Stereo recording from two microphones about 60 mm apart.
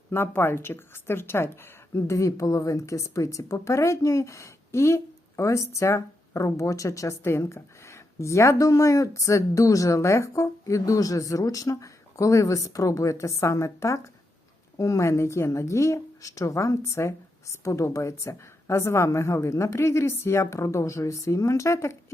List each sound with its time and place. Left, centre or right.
0.1 s speech: left
2.0 s speech: left